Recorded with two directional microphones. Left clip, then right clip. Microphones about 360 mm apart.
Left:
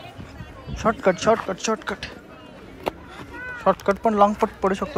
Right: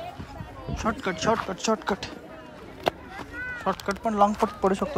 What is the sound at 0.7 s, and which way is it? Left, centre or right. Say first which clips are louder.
Speech: left 8 dB; centre.